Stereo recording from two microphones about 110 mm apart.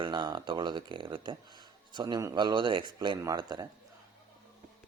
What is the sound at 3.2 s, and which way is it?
Speech, 35° right (ahead or behind).